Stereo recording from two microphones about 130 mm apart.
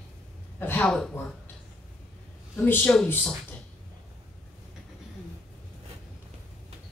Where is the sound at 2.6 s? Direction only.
15° left (ahead or behind).